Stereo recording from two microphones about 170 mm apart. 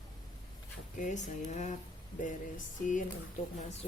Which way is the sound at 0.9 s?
45° left (ahead or behind).